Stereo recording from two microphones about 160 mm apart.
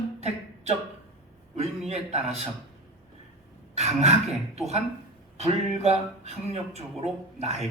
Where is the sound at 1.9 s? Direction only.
40° right (ahead or behind).